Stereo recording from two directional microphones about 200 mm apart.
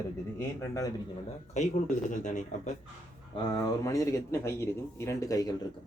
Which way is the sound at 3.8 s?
15° left (ahead or behind).